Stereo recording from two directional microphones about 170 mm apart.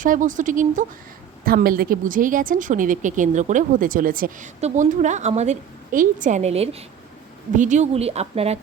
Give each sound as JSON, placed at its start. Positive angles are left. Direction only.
{"t": 0.0, "sound": "a woman's voice", "side_deg": -50}
{"t": 4.6, "sound": "a woman's voice", "side_deg": -45}
{"t": 7.5, "sound": "a woman's voice", "side_deg": -45}